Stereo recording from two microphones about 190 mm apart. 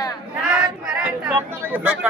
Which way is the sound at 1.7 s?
10° right (ahead or behind).